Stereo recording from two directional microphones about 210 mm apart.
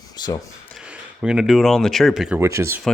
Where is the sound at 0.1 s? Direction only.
20° left (ahead or behind).